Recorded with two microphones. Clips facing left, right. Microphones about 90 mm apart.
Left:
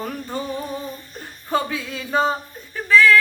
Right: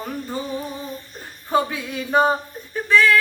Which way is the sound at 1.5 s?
20° right (ahead or behind).